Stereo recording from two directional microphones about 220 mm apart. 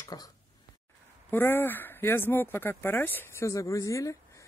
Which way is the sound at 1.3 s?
10° left (ahead or behind).